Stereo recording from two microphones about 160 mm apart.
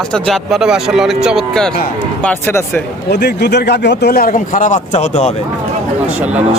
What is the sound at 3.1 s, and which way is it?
A man's voice, 90° left.